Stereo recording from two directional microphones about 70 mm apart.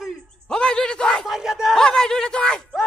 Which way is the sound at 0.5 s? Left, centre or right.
Centre.